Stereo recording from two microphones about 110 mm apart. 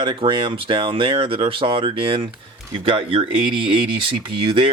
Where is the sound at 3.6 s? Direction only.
50° right (ahead or behind).